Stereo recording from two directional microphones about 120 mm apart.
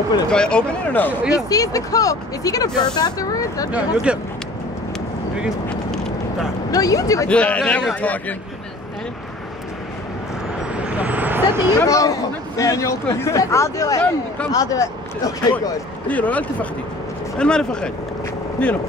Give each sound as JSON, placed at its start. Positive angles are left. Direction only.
{"t": 0.3, "sound": "a man's voice", "side_deg": 5}
{"t": 1.3, "sound": "speech", "side_deg": 30}
{"t": 3.7, "sound": "speech", "side_deg": -10}
{"t": 6.7, "sound": "speech", "side_deg": 30}
{"t": 7.2, "sound": "a man's voice", "side_deg": 10}
{"t": 10.7, "sound": "vehicle", "side_deg": -10}
{"t": 11.8, "sound": "speech", "side_deg": 25}
{"t": 16.1, "sound": "a man's voice", "side_deg": 10}